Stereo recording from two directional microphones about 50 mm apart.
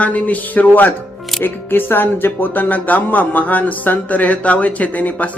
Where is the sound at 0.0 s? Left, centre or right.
Left.